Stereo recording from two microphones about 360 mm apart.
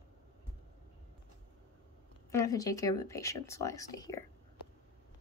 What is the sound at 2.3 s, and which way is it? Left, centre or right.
Speech, centre.